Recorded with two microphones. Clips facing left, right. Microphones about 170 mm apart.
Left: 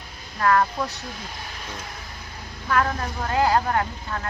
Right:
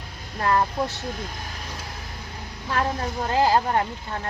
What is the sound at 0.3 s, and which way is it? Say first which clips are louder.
Speech: left 1 dB; 25° right (ahead or behind).